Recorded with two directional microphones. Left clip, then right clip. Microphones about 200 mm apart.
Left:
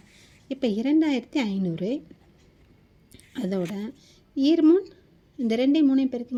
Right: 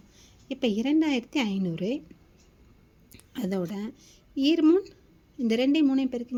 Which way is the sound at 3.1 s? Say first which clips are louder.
Left 2 dB; 10° left (ahead or behind).